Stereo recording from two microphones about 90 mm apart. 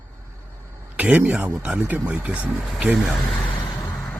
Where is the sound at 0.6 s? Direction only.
30° right (ahead or behind).